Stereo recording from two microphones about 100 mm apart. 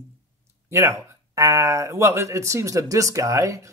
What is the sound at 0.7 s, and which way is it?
Speech, 30° right (ahead or behind).